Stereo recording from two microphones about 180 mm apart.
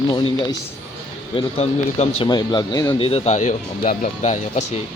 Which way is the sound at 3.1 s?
35° left (ahead or behind).